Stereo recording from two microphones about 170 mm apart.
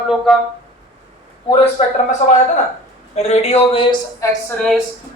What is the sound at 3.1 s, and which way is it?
A woman's voice, 40° left (ahead or behind).